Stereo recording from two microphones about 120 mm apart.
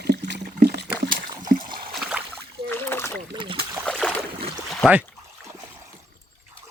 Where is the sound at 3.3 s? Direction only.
45° right (ahead or behind).